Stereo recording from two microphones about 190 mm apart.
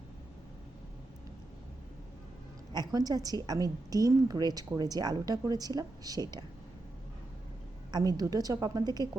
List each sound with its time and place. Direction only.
2.7 s a woman's voice: 20° right (ahead or behind)
7.9 s a woman's voice: 20° right (ahead or behind)